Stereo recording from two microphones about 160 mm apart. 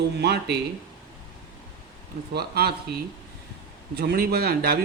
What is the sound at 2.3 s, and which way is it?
A man's voice, 85° right.